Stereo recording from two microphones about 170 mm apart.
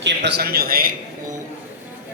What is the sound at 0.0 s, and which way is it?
Speech, 80° right.